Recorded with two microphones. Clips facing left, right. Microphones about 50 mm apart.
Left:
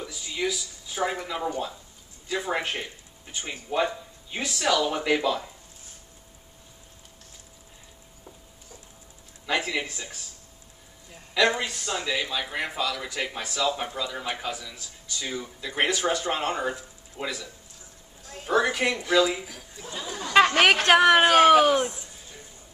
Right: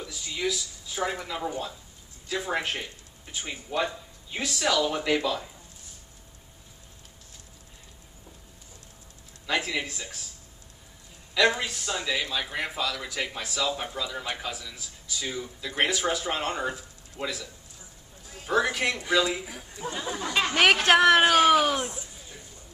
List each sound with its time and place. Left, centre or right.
0.0 s a man's voice: centre
9.5 s a man's voice: centre
11.3 s a man's voice: centre
15.3 s a man's voice: centre
18.5 s a man's voice: centre
19.4 s speech: centre
20.5 s a man's voice: centre